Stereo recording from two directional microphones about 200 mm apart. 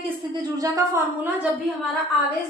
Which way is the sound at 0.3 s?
15° right (ahead or behind).